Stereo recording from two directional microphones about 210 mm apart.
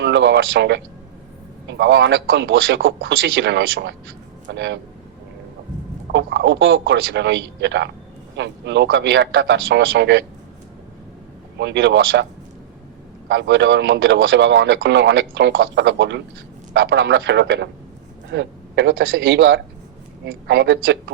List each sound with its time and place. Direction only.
0.0 s speech: 55° right (ahead or behind)
6.1 s speech: 55° right (ahead or behind)
11.5 s speech: 55° right (ahead or behind)
13.2 s a man's voice: 55° right (ahead or behind)